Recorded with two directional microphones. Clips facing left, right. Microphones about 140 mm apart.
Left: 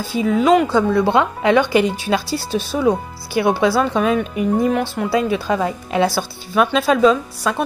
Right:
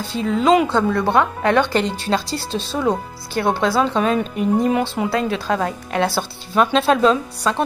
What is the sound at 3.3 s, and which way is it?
A woman's voice, 10° left (ahead or behind).